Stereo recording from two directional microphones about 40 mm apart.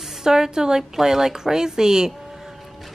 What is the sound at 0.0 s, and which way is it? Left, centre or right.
A woman's voice, centre.